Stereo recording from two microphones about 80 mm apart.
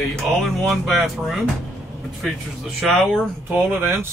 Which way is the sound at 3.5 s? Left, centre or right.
Right.